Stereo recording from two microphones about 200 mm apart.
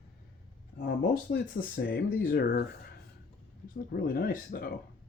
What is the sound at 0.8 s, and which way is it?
Speech, 50° left (ahead or behind).